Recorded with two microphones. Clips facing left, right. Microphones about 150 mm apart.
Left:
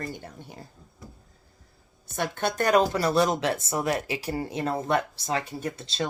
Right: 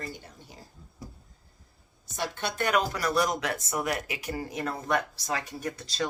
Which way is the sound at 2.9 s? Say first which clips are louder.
Left 4 dB; 30° left (ahead or behind).